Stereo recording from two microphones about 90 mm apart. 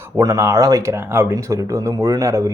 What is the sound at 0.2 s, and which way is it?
Speech, 35° right (ahead or behind).